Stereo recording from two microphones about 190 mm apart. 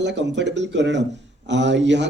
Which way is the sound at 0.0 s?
65° right (ahead or behind).